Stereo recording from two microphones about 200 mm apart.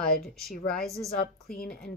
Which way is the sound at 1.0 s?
50° left (ahead or behind).